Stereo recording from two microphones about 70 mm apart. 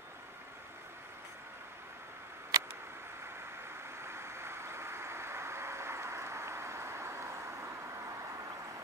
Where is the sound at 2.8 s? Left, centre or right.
Right.